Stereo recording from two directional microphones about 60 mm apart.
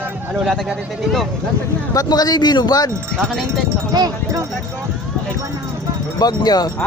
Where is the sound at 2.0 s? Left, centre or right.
Left.